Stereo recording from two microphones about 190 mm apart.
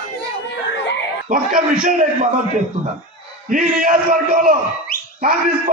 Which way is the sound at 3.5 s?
45° right (ahead or behind).